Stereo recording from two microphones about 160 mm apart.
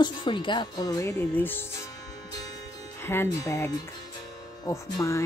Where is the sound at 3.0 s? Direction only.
15° left (ahead or behind).